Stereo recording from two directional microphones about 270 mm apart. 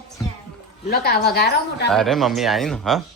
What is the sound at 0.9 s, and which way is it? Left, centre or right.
A woman's voice, left.